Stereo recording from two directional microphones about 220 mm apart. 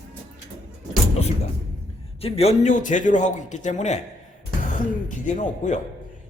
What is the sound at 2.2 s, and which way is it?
A man's voice, 25° left (ahead or behind).